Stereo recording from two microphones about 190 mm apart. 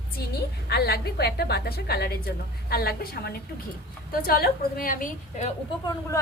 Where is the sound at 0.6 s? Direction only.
55° left (ahead or behind); by 5.5 s 40° left (ahead or behind).